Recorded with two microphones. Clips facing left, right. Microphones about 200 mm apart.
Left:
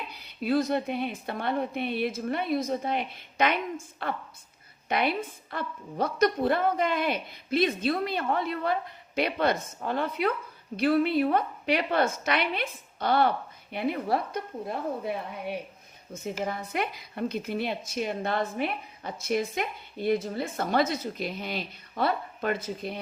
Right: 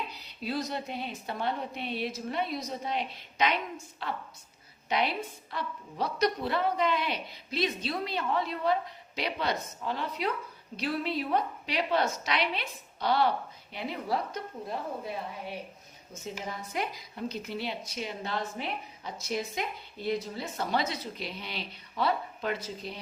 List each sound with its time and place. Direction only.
0.1 s a woman's voice: 55° left (ahead or behind)